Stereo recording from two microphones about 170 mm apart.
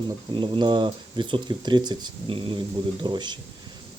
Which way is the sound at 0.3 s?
30° right (ahead or behind).